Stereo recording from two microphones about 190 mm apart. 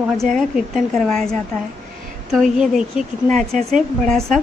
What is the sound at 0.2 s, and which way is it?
A woman's voice, centre (ahead or behind).